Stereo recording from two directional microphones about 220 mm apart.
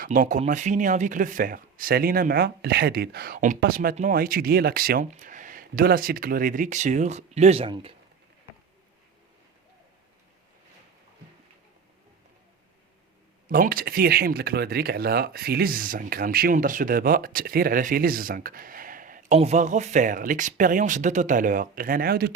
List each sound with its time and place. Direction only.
0.0 s speech: 35° right (ahead or behind)
13.5 s speech: 40° right (ahead or behind)